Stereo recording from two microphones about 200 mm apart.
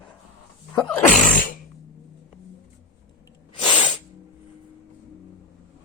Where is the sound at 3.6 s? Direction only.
25° left (ahead or behind).